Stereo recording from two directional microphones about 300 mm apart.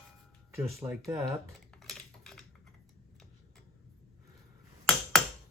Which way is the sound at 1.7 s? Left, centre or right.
Centre.